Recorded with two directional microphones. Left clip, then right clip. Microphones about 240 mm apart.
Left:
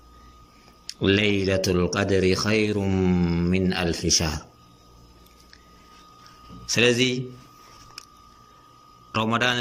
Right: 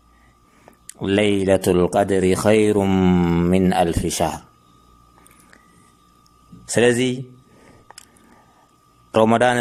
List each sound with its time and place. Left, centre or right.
0.9 s speech: right
6.7 s a man's voice: right
9.1 s a man's voice: right